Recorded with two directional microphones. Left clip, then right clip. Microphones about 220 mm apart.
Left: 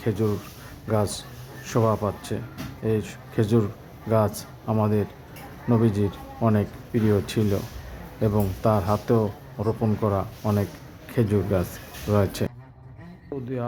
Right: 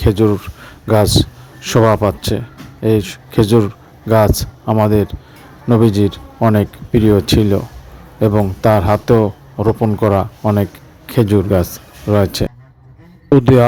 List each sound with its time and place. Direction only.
0.0 s a man's voice: 35° right (ahead or behind)